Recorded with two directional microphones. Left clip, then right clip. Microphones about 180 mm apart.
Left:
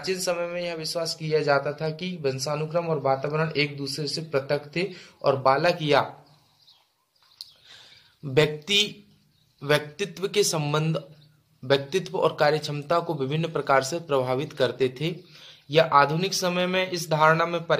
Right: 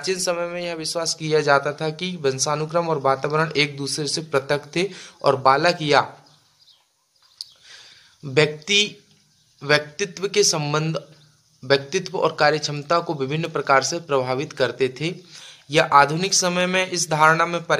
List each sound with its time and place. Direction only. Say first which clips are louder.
0.0 s speech: right 4 dB; 40° right (ahead or behind)
7.3 s a sound: right 6 dB; 15° right (ahead or behind)
9.6 s speech: right 4 dB; 15° right (ahead or behind)